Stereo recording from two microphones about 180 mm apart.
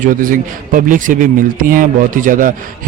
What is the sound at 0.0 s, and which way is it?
A man's voice, 50° right (ahead or behind).